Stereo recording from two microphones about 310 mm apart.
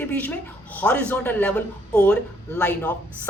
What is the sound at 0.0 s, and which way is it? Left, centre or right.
A man's voice, centre.